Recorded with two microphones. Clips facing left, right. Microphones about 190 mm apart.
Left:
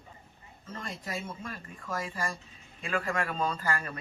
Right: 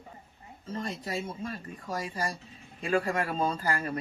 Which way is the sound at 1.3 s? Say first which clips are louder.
Right 4 dB; 30° right (ahead or behind).